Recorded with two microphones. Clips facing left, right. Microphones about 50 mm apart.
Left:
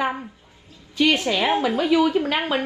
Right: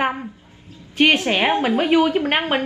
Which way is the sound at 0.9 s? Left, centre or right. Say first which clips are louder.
Right 3 dB; right.